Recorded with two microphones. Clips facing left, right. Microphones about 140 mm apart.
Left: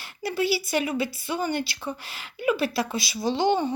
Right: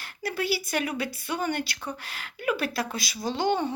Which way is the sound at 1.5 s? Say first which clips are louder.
Left 2 dB; 50° right (ahead or behind).